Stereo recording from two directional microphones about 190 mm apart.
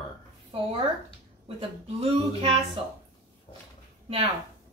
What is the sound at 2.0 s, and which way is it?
Speech, 30° right (ahead or behind).